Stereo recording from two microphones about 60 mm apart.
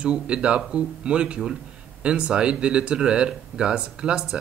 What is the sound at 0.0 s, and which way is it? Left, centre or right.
Speech, centre.